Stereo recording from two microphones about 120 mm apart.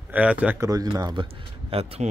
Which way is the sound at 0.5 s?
30° right (ahead or behind).